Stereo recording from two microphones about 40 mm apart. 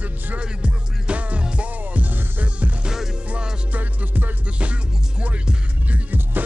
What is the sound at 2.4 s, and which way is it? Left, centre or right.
Music, right.